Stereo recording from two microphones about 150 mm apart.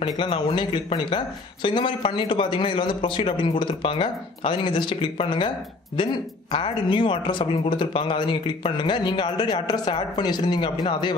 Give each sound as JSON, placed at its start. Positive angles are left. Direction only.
{"t": 0.0, "sound": "speech", "side_deg": 35}
{"t": 6.5, "sound": "speech", "side_deg": 35}